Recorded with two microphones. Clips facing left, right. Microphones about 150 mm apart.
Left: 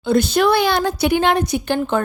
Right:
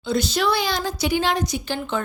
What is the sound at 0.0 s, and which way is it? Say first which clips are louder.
A woman's voice: left 6 dB; 55° left (ahead or behind).